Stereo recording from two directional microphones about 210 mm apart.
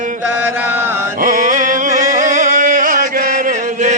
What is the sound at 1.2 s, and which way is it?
Music, 40° right (ahead or behind).